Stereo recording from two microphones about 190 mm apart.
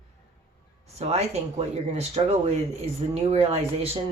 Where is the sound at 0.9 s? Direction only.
35° right (ahead or behind).